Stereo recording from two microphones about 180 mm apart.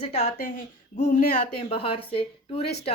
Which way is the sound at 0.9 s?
45° left (ahead or behind).